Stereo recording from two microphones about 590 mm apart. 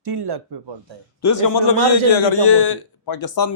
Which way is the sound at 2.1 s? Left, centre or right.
Left.